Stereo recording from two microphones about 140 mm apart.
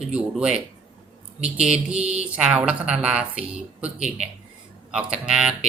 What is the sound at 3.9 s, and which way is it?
Speech, 55° right (ahead or behind).